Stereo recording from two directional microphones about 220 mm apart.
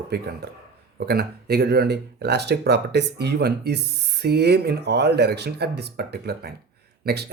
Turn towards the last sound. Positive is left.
turn(degrees=-45)  # may be behind; listen again after turning